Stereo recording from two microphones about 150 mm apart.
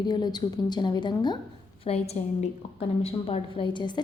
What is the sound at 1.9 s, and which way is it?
A woman's voice, 45° left (ahead or behind).